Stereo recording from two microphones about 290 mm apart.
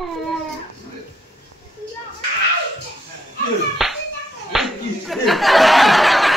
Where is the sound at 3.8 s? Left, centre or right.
Centre.